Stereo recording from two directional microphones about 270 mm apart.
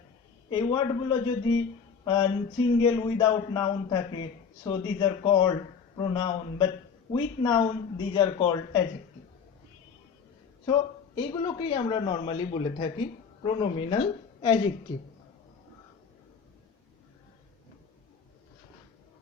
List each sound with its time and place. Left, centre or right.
0.5 s a man's voice: centre
10.7 s speech: centre